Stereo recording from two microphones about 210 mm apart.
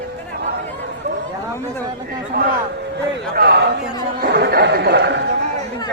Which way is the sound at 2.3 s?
45° right (ahead or behind).